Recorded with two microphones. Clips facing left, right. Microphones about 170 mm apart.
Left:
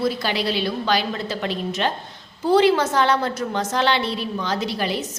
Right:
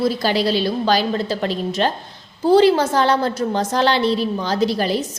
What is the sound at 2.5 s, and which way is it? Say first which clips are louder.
A woman's voice: right 3 dB; 35° right (ahead or behind).